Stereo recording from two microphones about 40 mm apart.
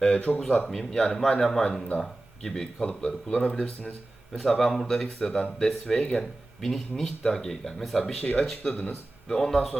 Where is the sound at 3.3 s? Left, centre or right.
Left.